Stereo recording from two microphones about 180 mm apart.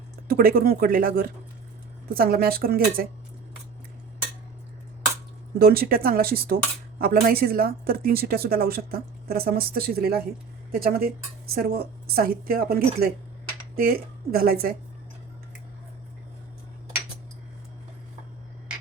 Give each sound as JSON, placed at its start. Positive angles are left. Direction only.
{"t": 0.3, "sound": "a woman's voice", "side_deg": -55}
{"t": 5.5, "sound": "a woman's voice", "side_deg": -55}